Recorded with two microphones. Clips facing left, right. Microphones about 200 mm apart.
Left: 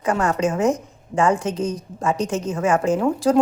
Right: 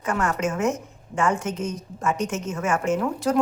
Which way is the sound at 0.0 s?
30° left (ahead or behind).